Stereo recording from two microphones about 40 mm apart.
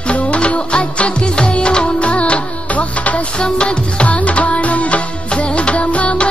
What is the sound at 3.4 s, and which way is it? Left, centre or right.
Music, left.